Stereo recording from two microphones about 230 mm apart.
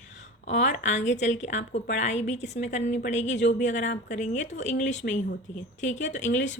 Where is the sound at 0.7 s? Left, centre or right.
Left.